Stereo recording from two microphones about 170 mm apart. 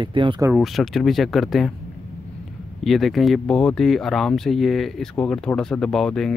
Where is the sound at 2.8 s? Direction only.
Centre (ahead or behind).